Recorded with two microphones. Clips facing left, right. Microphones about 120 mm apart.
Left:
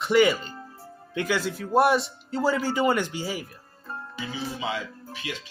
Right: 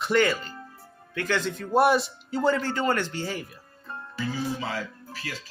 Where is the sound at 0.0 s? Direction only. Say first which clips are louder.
Left 3 dB; 10° left (ahead or behind).